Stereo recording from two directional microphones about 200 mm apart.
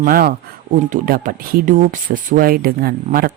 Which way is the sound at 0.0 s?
50° right (ahead or behind).